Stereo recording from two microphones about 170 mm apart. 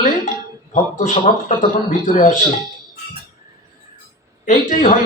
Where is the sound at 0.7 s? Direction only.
50° left (ahead or behind).